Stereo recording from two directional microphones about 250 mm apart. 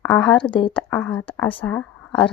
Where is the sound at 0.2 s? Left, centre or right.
Centre.